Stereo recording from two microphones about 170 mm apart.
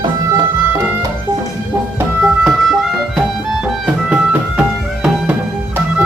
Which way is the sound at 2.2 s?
Centre (ahead or behind).